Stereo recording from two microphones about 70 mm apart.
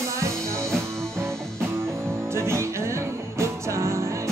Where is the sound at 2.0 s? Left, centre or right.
Right.